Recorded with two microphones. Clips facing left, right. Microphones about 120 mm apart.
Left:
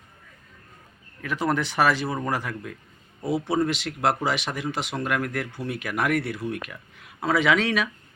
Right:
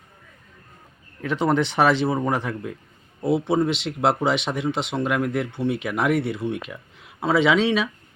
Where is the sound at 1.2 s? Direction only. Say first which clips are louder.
Right 4 dB; 25° right (ahead or behind).